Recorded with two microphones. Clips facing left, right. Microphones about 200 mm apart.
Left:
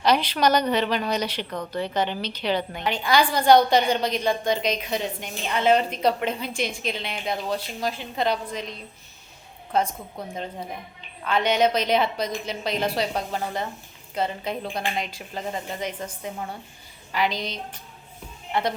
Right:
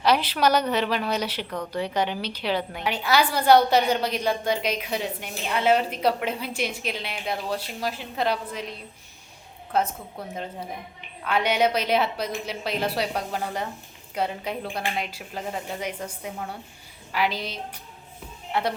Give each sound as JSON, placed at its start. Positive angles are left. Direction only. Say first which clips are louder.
{"t": 0.0, "sound": "a woman's voice", "louder": "left 1 dB", "side_deg": -5}
{"t": 9.7, "sound": "a woman's voice", "louder": "left 1 dB", "side_deg": -5}